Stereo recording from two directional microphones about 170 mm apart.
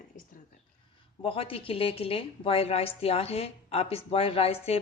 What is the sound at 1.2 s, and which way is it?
A woman's voice, 30° left (ahead or behind).